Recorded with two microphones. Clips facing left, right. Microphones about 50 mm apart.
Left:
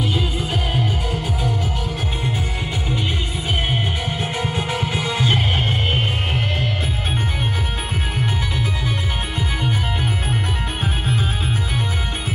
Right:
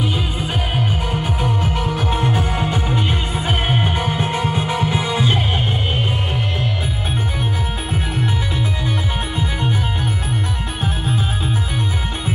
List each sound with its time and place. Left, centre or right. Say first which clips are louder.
1.2 s music: right 3 dB; right
4.4 s music: right 3 dB; centre